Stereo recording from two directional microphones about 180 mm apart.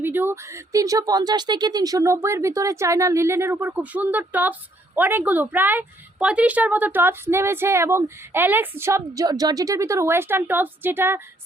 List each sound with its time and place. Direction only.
0.0 s a woman's voice: 10° right (ahead or behind)